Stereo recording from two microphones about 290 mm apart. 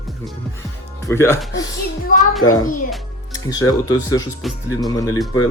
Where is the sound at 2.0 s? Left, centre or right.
Left.